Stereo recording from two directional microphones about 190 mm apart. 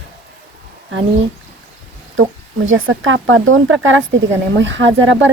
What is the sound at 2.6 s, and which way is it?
Speech, 90° right.